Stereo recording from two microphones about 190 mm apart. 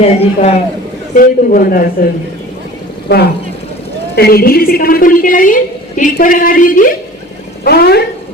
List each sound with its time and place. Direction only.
0.0 s a man's voice: 35° left (ahead or behind)
1.1 s a woman's voice: 45° left (ahead or behind)
4.1 s a woman's voice: 55° left (ahead or behind)